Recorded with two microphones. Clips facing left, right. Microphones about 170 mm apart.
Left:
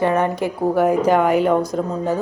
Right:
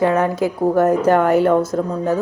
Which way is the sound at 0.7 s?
10° left (ahead or behind).